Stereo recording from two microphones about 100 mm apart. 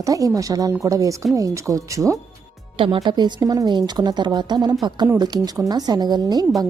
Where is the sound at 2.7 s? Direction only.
60° right (ahead or behind).